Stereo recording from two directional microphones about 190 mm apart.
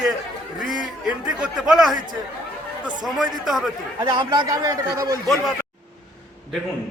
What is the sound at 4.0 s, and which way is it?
Speech, 25° right (ahead or behind).